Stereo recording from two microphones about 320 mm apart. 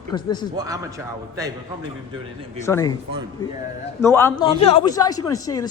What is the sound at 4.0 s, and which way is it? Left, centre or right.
Speech, centre.